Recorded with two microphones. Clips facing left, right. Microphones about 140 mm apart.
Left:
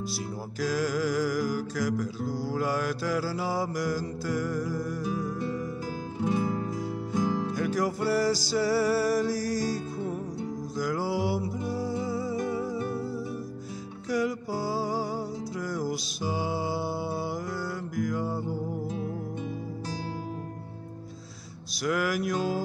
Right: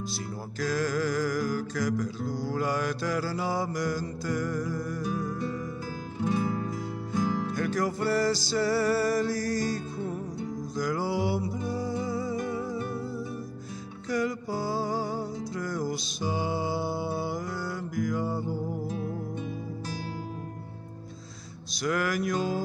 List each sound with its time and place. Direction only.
0.1 s music: 10° left (ahead or behind)
14.0 s music: 10° left (ahead or behind)
21.7 s music: 5° left (ahead or behind)